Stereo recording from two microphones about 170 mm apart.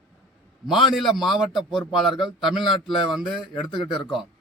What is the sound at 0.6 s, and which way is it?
A man's voice, centre (ahead or behind).